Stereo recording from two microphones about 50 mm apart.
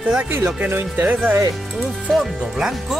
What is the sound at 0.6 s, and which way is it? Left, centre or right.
Speech, right.